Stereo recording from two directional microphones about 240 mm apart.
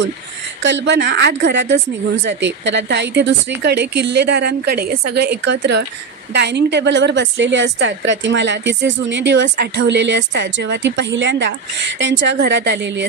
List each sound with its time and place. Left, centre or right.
0.6 s a woman's voice: right